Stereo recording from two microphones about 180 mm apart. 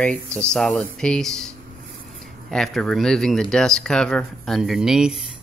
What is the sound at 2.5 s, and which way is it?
Speech, centre (ahead or behind).